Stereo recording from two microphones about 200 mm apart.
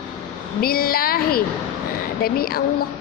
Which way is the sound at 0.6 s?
50° left (ahead or behind).